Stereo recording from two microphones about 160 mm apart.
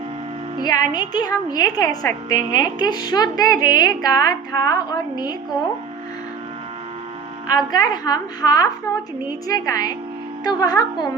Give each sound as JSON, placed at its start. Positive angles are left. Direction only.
{"t": 0.6, "sound": "a woman's voice", "side_deg": 25}
{"t": 7.5, "sound": "a woman's voice", "side_deg": 25}